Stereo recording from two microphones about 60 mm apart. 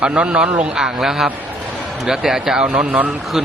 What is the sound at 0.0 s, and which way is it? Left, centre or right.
A man's voice, centre.